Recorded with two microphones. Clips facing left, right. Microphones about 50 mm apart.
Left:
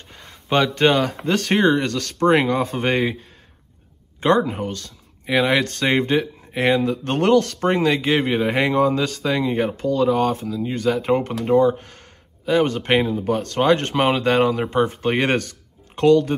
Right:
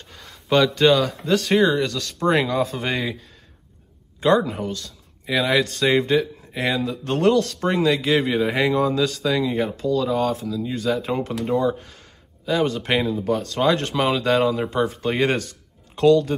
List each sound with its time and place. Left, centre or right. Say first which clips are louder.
0.1 s a sound: right 1 dB; left
0.6 s speech: even; left
2.2 s speech: left 3 dB; left
4.5 s speech: left 1 dB; left